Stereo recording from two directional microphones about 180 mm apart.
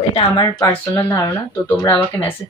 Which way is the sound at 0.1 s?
25° left (ahead or behind).